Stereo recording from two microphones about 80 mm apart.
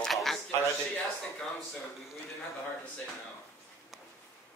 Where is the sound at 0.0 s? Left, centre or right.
Centre.